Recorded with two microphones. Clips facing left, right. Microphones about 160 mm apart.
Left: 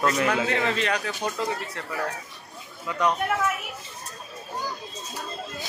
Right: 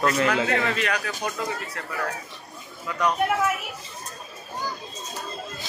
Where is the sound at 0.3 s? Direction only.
25° left (ahead or behind).